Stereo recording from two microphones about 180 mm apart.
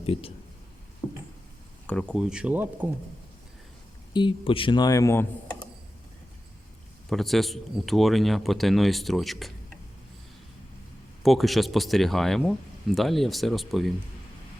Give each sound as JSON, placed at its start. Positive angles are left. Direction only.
{"t": 0.0, "sound": "speech", "side_deg": 30}
{"t": 1.0, "sound": "a sound", "side_deg": 5}
{"t": 1.9, "sound": "speech", "side_deg": 5}
{"t": 4.1, "sound": "speech", "side_deg": 25}
{"t": 7.1, "sound": "speech", "side_deg": 0}
{"t": 11.2, "sound": "speech", "side_deg": 0}